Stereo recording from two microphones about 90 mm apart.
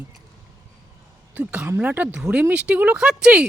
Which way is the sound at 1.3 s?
15° right (ahead or behind).